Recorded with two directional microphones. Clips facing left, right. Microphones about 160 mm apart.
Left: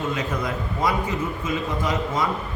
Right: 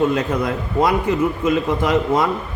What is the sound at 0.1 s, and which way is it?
A man's voice, 65° right (ahead or behind).